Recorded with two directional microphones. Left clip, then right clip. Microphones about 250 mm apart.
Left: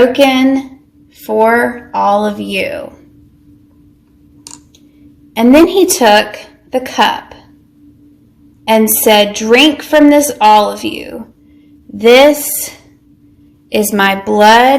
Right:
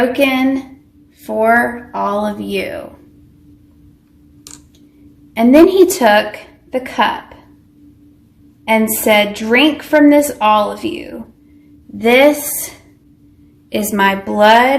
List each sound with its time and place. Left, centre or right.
0.1 s a woman's voice: left
5.3 s a woman's voice: left
9.0 s a woman's voice: left